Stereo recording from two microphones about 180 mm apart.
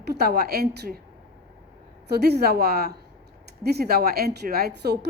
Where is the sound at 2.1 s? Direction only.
65° right (ahead or behind).